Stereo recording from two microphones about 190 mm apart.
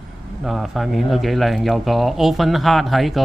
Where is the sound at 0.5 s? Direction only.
Centre (ahead or behind).